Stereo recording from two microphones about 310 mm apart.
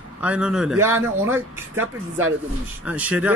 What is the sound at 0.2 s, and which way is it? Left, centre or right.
Speech, centre.